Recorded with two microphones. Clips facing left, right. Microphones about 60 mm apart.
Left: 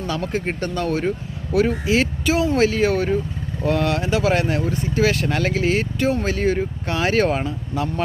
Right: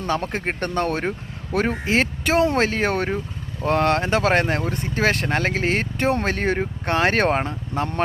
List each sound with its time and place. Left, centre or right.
0.0 s speech: right